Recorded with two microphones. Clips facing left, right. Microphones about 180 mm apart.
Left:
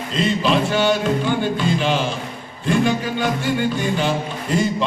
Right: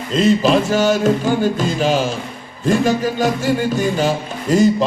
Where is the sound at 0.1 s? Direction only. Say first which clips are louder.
Right 6 dB; 45° right (ahead or behind).